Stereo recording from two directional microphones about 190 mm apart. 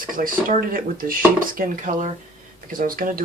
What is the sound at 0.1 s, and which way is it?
Speech, 45° right (ahead or behind).